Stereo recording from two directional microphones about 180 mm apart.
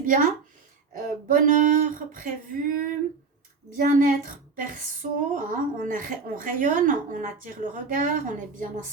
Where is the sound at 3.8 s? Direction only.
50° right (ahead or behind).